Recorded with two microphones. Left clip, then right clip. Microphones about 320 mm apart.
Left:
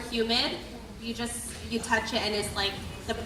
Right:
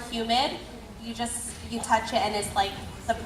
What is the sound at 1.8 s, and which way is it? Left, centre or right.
Speech, centre.